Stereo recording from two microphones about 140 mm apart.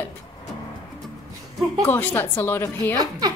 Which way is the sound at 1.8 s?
15° left (ahead or behind).